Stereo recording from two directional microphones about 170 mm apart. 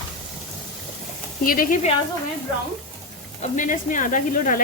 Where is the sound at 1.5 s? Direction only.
55° left (ahead or behind).